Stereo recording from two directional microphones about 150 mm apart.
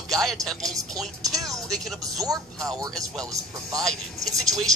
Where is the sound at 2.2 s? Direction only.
25° right (ahead or behind).